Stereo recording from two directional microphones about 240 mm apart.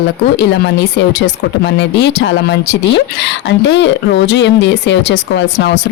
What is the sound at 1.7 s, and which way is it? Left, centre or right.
Speech, left.